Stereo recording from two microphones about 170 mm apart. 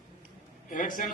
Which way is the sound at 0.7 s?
50° left (ahead or behind).